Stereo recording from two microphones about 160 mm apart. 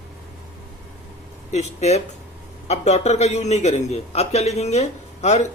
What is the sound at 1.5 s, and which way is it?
A man's voice, 45° left (ahead or behind).